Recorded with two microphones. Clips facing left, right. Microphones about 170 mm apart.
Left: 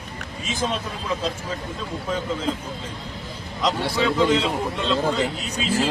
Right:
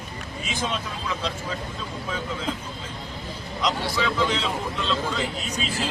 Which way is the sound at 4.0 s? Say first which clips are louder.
Left 7 dB; 45° left (ahead or behind).